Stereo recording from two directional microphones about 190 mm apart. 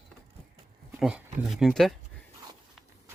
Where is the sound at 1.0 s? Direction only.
5° right (ahead or behind).